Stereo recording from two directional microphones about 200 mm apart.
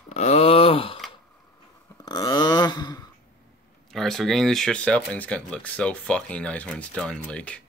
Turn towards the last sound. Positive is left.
turn(degrees=5)  # may be behind; listen again after turning